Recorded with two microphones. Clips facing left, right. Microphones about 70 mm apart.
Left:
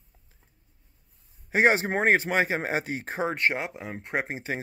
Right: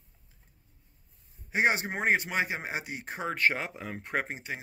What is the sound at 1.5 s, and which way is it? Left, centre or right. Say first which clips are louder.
Speech: left 6 dB; left.